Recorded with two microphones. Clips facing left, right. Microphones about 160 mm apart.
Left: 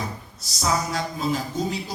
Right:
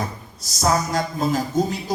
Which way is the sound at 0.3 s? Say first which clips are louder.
Right 4 dB; 45° right (ahead or behind).